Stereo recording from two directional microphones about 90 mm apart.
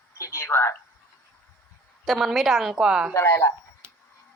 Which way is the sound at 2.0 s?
Centre (ahead or behind).